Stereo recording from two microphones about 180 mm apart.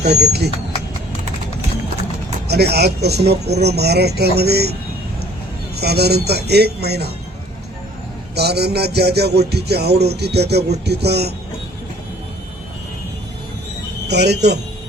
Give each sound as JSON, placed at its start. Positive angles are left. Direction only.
{"t": 0.0, "sound": "speech", "side_deg": -65}
{"t": 2.5, "sound": "speech", "side_deg": -65}
{"t": 5.7, "sound": "speech", "side_deg": -65}
{"t": 8.4, "sound": "speech", "side_deg": -65}
{"t": 14.1, "sound": "speech", "side_deg": -70}